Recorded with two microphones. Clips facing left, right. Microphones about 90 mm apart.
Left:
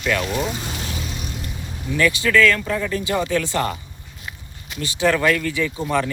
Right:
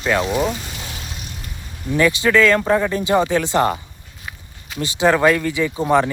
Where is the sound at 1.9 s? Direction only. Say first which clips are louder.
Right 3 dB; 25° right (ahead or behind).